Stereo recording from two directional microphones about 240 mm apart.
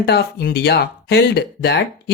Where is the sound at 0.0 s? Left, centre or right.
Left.